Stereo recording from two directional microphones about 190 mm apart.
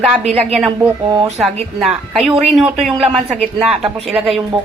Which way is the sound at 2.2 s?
Centre (ahead or behind).